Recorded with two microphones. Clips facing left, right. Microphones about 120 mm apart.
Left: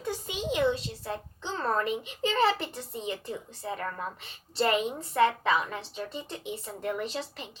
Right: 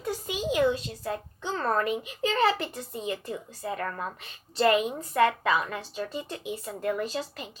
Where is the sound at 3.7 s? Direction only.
50° right (ahead or behind).